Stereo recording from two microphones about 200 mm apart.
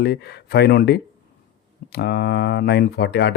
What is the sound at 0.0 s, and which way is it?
Speech, 55° left (ahead or behind).